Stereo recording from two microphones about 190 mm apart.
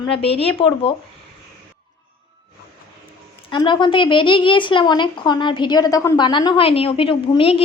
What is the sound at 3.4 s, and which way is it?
A woman's voice, 25° left (ahead or behind).